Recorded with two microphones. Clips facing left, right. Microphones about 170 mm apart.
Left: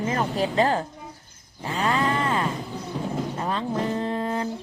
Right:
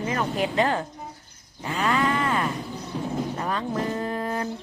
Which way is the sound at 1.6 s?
30° left (ahead or behind).